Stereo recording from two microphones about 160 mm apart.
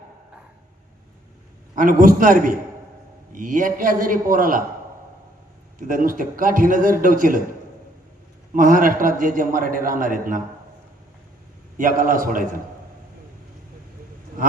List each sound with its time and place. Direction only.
1.7 s a man's voice: 55° right (ahead or behind)
5.9 s a man's voice: 60° right (ahead or behind)
8.5 s a man's voice: 60° right (ahead or behind)
11.8 s a man's voice: 55° right (ahead or behind)